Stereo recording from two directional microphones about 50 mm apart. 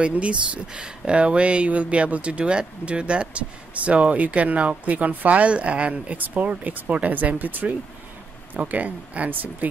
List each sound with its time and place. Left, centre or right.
0.0 s speech: right